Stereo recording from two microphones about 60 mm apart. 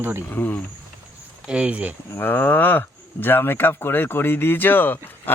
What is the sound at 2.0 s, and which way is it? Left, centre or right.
Speech, left.